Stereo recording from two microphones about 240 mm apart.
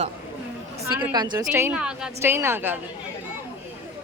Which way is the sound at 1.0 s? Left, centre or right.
Centre.